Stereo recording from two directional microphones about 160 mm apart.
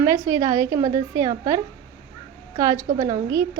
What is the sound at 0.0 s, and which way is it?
A woman's voice, 20° right (ahead or behind).